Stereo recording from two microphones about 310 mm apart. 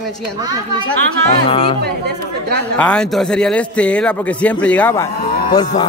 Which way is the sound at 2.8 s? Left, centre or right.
Centre.